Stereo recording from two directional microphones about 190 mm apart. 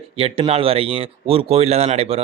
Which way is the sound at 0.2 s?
30° right (ahead or behind).